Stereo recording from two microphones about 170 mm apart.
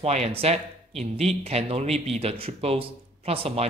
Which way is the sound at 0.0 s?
40° right (ahead or behind).